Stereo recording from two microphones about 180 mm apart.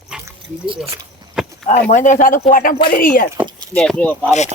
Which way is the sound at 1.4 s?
Centre (ahead or behind).